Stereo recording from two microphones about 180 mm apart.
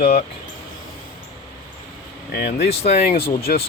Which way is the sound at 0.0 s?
55° left (ahead or behind).